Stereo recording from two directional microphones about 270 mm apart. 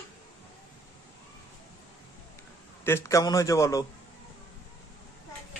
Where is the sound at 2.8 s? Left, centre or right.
Centre.